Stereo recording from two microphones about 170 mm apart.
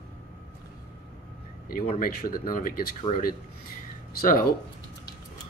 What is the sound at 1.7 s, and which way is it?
Speech, 60° left (ahead or behind).